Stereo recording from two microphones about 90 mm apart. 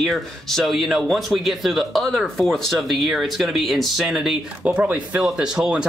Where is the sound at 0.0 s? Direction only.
5° left (ahead or behind).